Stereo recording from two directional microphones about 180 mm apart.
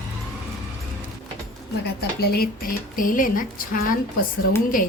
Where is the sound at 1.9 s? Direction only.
60° left (ahead or behind).